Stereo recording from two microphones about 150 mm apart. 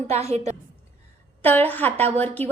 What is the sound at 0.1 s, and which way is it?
Speech, 45° right (ahead or behind).